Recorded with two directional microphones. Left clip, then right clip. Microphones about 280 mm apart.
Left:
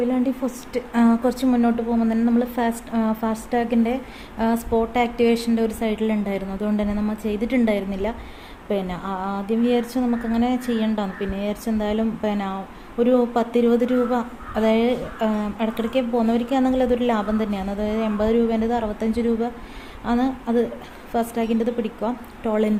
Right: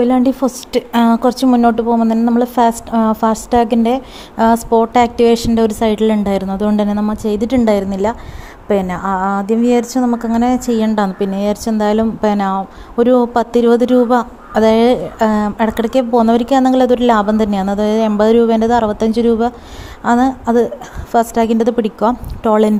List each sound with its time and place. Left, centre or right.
0.0 s a woman's voice: right